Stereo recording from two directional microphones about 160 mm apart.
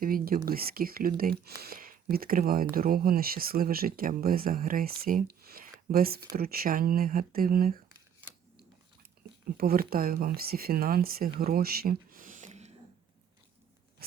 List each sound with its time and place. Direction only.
0.0 s speech: 60° right (ahead or behind)
9.6 s speech: 70° right (ahead or behind)
11.3 s a sound: 70° right (ahead or behind); by 12.7 s 45° right (ahead or behind)